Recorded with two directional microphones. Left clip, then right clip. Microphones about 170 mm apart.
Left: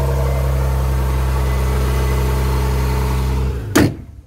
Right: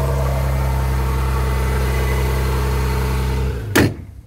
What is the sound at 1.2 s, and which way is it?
Vehicle, 40° left (ahead or behind).